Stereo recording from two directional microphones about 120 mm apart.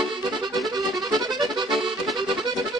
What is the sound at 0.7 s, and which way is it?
Accordion, 35° right (ahead or behind).